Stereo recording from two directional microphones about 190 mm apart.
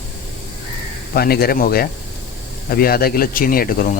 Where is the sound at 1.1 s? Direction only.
55° left (ahead or behind).